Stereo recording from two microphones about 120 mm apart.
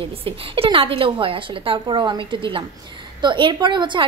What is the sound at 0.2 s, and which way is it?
A woman's voice, 50° right (ahead or behind).